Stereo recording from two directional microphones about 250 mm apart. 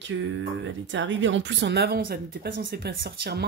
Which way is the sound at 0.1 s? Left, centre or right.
Right.